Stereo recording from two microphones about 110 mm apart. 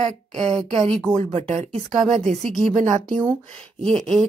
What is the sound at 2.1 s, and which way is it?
Speech, 90° right.